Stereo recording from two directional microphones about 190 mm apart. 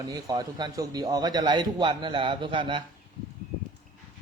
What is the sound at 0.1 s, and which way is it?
A man's voice, 20° right (ahead or behind).